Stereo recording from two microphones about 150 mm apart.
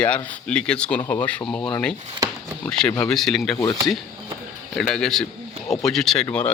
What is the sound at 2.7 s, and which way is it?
Speech, 5° left (ahead or behind).